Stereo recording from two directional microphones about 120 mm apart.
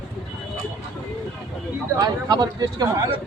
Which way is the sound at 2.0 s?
35° right (ahead or behind).